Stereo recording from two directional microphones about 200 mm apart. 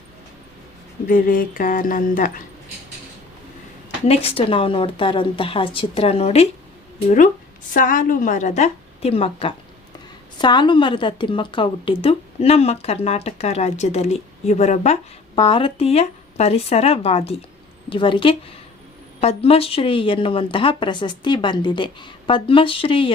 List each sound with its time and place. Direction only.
1.0 s speech: 45° left (ahead or behind)
4.0 s speech: 30° left (ahead or behind)
7.7 s a woman's voice: 40° left (ahead or behind); by 23.1 s 25° left (ahead or behind)